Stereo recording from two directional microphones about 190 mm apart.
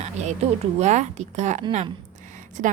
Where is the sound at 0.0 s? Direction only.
35° right (ahead or behind).